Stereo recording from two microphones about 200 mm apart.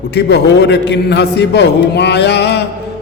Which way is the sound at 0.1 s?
55° left (ahead or behind).